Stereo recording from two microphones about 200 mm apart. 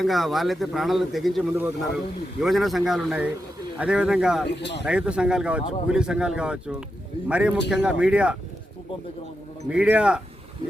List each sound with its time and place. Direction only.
0.0 s a man's voice: centre (ahead or behind)
4.6 s speech: 60° left (ahead or behind)
4.9 s speech: 5° right (ahead or behind)
9.6 s speech: 5° right (ahead or behind)